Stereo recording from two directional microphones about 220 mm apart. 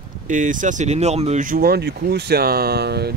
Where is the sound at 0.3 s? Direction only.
35° right (ahead or behind).